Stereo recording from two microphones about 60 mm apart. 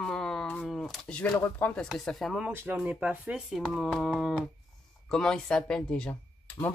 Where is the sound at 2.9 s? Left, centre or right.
Right.